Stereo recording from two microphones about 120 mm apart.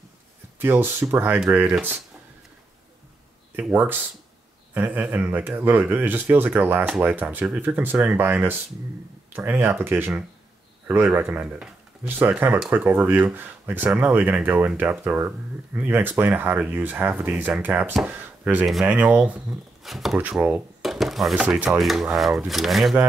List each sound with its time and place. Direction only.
0.6 s speech: 20° right (ahead or behind)
3.5 s speech: 15° right (ahead or behind)
11.1 s speech: 15° right (ahead or behind)
19.8 s speech: centre (ahead or behind)
20.2 s speech: 15° right (ahead or behind)
20.8 s speech: centre (ahead or behind)